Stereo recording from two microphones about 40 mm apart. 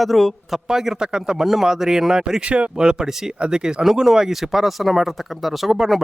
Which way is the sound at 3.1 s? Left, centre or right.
Centre.